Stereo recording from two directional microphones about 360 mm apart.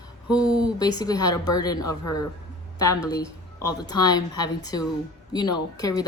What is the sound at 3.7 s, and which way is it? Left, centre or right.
Speech, centre.